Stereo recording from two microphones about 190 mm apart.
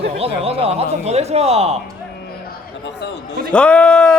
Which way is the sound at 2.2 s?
60° left (ahead or behind).